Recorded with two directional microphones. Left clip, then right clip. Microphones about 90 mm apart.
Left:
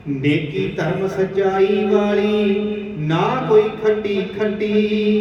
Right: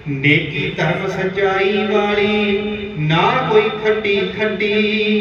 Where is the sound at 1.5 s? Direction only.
45° left (ahead or behind).